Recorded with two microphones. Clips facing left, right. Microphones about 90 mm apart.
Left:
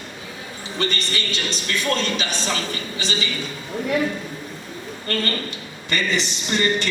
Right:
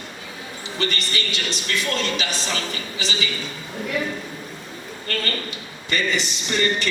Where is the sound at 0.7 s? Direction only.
35° left (ahead or behind).